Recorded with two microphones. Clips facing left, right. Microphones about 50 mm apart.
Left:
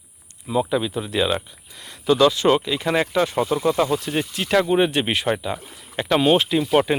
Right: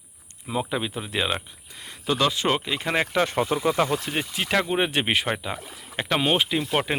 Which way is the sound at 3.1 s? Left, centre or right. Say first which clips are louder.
Left 2 dB; right.